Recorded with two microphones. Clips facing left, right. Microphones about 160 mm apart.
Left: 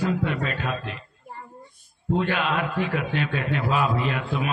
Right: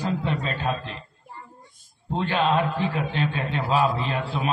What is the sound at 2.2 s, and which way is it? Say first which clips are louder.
A man's voice: right 4 dB; 30° right (ahead or behind).